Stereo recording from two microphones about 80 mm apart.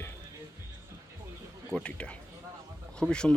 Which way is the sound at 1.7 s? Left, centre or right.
Centre.